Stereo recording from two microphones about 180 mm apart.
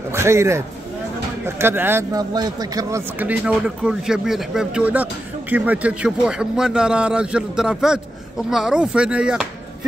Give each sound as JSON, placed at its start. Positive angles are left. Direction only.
{"t": 0.1, "sound": "speech", "side_deg": -15}
{"t": 3.2, "sound": "speech", "side_deg": -10}